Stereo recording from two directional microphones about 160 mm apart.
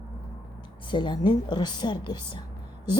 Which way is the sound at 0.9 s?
30° left (ahead or behind).